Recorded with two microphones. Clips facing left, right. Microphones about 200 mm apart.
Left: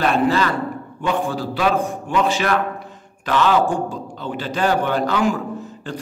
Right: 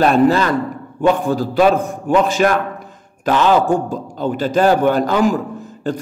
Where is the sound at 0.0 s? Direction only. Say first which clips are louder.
Right 5 dB; 40° right (ahead or behind).